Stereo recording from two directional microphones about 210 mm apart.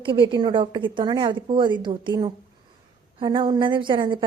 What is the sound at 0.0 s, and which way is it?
A woman's voice, 25° right (ahead or behind).